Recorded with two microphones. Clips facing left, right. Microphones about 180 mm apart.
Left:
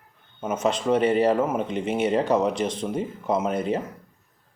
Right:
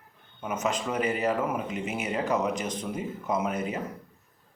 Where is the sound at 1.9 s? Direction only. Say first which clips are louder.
Left 8 dB; 30° left (ahead or behind).